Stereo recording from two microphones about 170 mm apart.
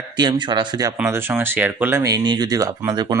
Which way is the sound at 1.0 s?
15° right (ahead or behind).